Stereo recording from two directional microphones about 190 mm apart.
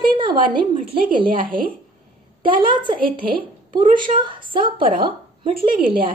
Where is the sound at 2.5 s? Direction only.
25° right (ahead or behind).